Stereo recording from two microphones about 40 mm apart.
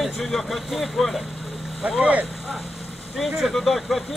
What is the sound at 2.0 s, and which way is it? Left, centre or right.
Speech, right.